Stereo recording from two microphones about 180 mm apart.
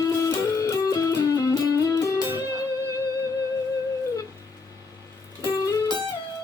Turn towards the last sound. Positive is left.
turn(degrees=15)  # may be behind; listen again after turning